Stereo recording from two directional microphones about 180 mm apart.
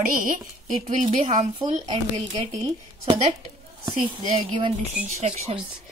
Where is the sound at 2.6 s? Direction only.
25° right (ahead or behind).